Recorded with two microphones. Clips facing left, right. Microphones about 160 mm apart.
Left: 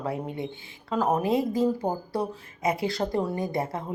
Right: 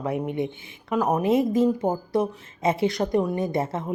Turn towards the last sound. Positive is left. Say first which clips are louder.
# right 3 dB
turn(degrees=-25)  # may be behind; listen again after turning